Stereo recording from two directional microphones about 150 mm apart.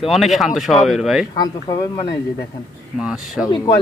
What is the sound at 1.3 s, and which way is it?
Speech, 30° left (ahead or behind).